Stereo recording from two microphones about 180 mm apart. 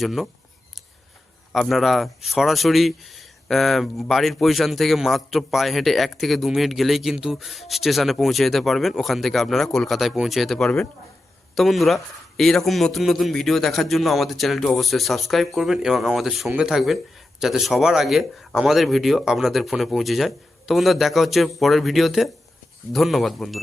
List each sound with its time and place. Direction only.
0.0 s speech: centre (ahead or behind)
1.5 s speech: centre (ahead or behind)